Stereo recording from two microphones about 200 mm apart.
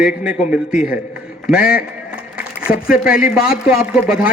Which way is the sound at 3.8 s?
5° right (ahead or behind).